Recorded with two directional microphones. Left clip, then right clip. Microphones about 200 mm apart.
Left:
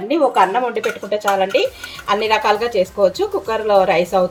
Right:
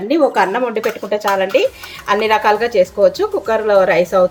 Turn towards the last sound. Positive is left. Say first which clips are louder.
# right 2 dB
turn(degrees=-10)  # may be behind; listen again after turning